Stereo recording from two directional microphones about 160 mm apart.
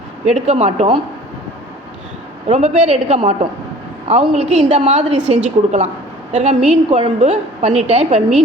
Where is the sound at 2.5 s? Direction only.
40° right (ahead or behind).